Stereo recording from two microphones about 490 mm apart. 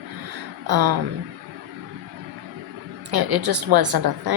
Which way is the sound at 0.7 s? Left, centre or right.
Right.